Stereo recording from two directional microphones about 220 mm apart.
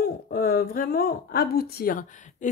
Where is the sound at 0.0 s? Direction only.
40° left (ahead or behind).